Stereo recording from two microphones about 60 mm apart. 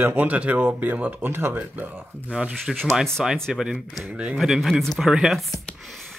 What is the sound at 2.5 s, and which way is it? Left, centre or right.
Speech, centre.